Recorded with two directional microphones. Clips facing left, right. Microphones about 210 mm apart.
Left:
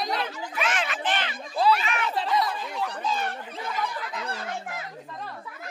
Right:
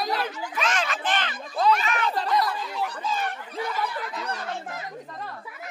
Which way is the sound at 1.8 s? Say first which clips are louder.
Right 2 dB; 40° right (ahead or behind).